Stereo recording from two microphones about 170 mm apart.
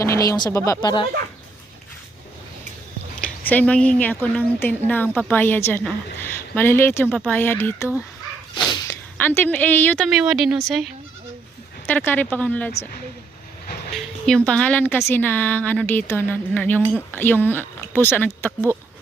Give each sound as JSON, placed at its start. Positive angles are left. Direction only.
{"t": 0.0, "sound": "speech", "side_deg": 20}
{"t": 3.2, "sound": "speech", "side_deg": 10}
{"t": 9.1, "sound": "speech", "side_deg": 10}
{"t": 10.1, "sound": "speech", "side_deg": -5}
{"t": 11.9, "sound": "speech", "side_deg": 10}
{"t": 13.9, "sound": "speech", "side_deg": 5}